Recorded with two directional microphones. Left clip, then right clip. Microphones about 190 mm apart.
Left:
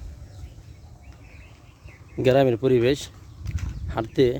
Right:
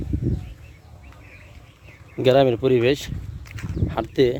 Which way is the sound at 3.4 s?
10° right (ahead or behind).